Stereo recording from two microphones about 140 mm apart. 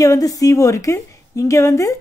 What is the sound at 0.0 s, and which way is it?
A woman's voice, 25° left (ahead or behind).